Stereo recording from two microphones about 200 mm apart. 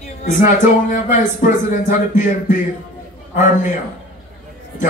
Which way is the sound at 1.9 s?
40° left (ahead or behind).